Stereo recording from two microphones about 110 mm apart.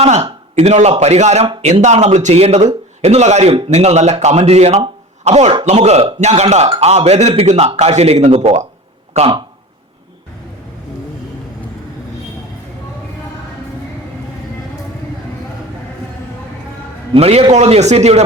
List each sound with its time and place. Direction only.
0.0 s a man's voice: 65° right (ahead or behind)
17.2 s a man's voice: 70° right (ahead or behind)
17.5 s a man's voice: 85° right